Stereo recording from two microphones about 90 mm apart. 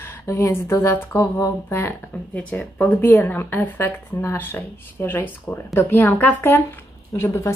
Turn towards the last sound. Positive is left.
turn(degrees=30)  # may be behind; listen again after turning